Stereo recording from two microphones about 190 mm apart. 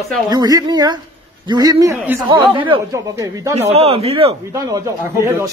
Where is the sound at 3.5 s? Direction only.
35° right (ahead or behind).